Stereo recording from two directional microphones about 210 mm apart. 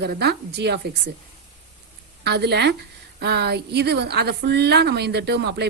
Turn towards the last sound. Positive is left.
turn(degrees=-55)  # may be behind; listen again after turning